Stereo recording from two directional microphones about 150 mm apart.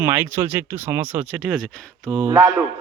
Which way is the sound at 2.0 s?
25° right (ahead or behind).